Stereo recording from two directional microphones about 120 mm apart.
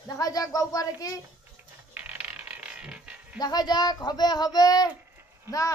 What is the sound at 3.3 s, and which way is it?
A child's voice, 35° left (ahead or behind).